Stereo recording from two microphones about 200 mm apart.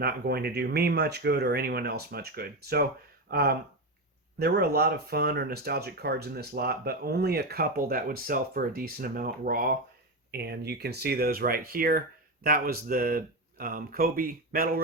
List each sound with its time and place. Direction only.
0.0 s speech: 50° right (ahead or behind)